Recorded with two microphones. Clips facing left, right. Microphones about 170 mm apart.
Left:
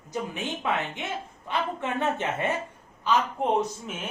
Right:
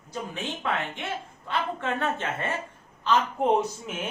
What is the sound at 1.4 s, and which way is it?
Speech, 15° left (ahead or behind).